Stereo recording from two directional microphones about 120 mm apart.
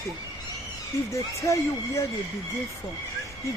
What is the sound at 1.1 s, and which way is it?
Speech, 25° left (ahead or behind).